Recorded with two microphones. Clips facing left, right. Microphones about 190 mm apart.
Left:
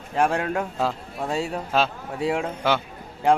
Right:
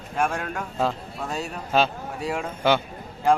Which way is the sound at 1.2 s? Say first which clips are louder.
Left 8 dB; 25° left (ahead or behind).